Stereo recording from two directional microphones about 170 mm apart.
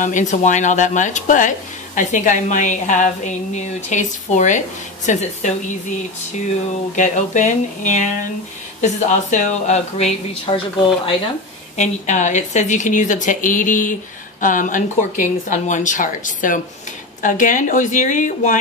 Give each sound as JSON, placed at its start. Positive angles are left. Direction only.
{"t": 0.0, "sound": "a woman's voice", "side_deg": 45}
{"t": 7.0, "sound": "a woman's voice", "side_deg": 45}
{"t": 11.7, "sound": "a woman's voice", "side_deg": 45}